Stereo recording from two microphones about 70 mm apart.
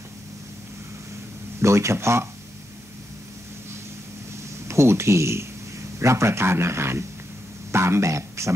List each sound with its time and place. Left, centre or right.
1.6 s speech: right
4.6 s a man's voice: right